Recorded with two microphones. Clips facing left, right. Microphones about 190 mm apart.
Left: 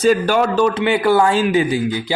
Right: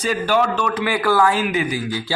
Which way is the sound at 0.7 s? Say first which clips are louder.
Left 4 dB; 25° left (ahead or behind).